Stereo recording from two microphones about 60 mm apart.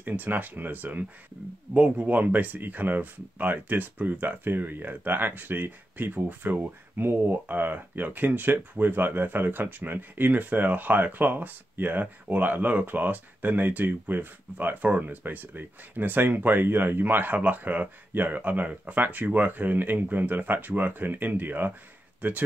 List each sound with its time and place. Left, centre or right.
0.0 s speech: right